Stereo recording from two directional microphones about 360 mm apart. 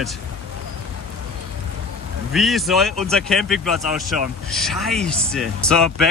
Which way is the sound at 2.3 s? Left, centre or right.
Centre.